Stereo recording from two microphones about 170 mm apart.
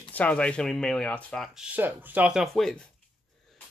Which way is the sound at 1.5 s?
10° right (ahead or behind).